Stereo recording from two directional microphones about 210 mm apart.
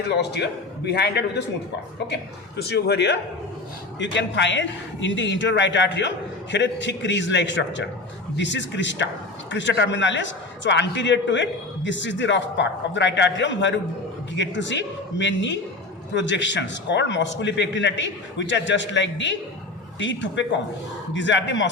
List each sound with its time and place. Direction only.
0.1 s a man's voice: 55° left (ahead or behind)
2.6 s a man's voice: 50° left (ahead or behind)